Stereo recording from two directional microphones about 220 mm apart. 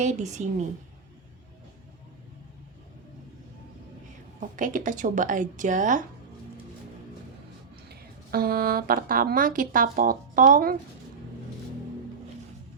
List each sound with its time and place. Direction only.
0.0 s a woman's voice: 30° right (ahead or behind)
4.4 s a woman's voice: 35° right (ahead or behind)
7.9 s a woman's voice: 45° right (ahead or behind)